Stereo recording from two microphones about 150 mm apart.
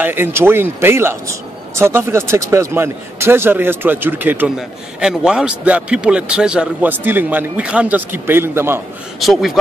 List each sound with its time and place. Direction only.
0.0 s a man's voice: 15° right (ahead or behind)
9.2 s speech: centre (ahead or behind)